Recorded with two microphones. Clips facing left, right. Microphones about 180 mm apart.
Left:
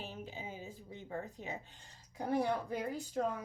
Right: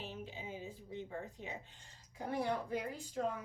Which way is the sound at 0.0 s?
45° left (ahead or behind).